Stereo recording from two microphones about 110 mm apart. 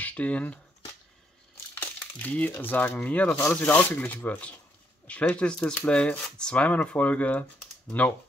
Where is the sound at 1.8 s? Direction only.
15° left (ahead or behind).